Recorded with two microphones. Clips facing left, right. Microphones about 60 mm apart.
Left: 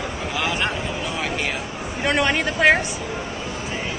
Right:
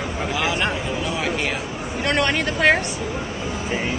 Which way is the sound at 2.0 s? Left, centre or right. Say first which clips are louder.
Left 1 dB; centre.